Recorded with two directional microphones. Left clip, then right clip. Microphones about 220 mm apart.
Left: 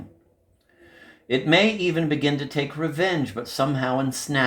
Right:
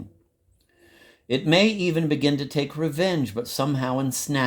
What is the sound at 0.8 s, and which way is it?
Speech, 55° right (ahead or behind).